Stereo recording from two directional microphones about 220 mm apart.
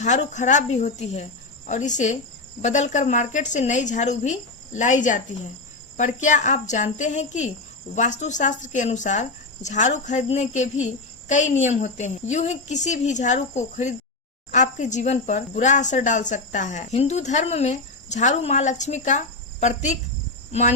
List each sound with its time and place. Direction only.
0.0 s speech: 35° left (ahead or behind)